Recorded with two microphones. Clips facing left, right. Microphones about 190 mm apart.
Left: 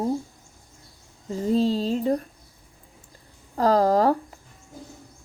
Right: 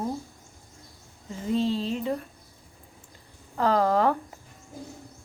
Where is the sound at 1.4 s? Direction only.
35° left (ahead or behind).